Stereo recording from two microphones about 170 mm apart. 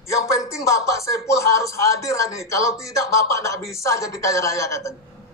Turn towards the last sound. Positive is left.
turn(degrees=15)  # may be behind; listen again after turning